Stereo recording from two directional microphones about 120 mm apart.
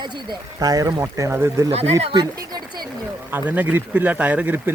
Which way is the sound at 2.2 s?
35° right (ahead or behind).